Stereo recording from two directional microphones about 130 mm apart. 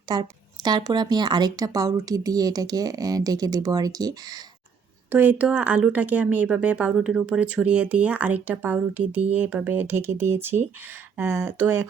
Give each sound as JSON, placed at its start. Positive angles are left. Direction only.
{"t": 0.1, "sound": "a woman's voice", "side_deg": -35}
{"t": 5.1, "sound": "speech", "side_deg": -15}